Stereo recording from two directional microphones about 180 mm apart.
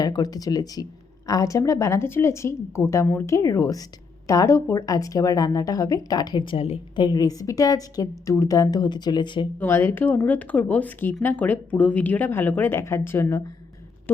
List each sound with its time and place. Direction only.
0.0 s a woman's voice: 20° left (ahead or behind)
9.6 s speech: 15° left (ahead or behind)